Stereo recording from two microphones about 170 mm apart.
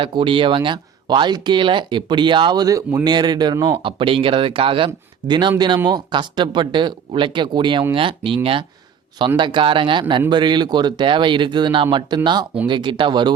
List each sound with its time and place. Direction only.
0.0 s speech: 30° right (ahead or behind)